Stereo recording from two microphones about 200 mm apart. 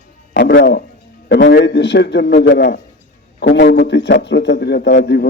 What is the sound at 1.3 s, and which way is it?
A man's voice, 60° left (ahead or behind).